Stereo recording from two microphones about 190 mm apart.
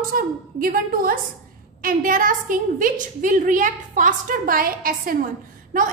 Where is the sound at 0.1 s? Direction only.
50° right (ahead or behind).